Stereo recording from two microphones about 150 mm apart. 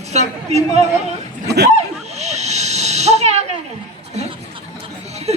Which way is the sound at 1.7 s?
45° right (ahead or behind).